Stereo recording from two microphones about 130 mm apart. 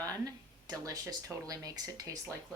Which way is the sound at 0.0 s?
30° right (ahead or behind).